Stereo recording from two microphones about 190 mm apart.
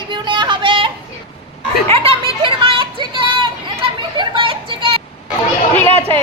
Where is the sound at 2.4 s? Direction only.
25° right (ahead or behind).